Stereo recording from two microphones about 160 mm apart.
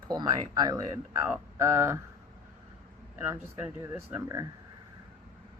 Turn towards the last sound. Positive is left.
turn(degrees=-15)  # may be behind; listen again after turning